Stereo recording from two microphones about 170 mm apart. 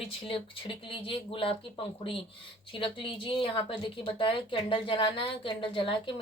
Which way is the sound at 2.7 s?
30° left (ahead or behind).